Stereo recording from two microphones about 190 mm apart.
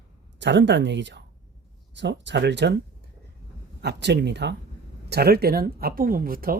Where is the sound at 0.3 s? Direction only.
70° right (ahead or behind).